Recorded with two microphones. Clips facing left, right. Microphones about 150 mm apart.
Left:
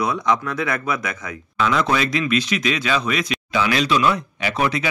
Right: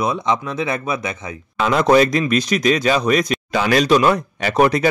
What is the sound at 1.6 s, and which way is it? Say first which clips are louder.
Speech: right 6 dB; 40° right (ahead or behind).